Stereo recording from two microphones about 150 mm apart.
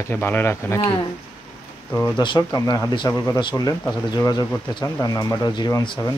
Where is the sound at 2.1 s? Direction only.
30° left (ahead or behind).